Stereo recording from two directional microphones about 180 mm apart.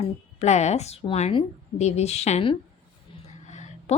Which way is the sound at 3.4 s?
40° left (ahead or behind).